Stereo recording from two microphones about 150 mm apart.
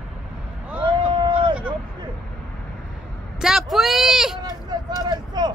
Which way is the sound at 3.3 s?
5° right (ahead or behind).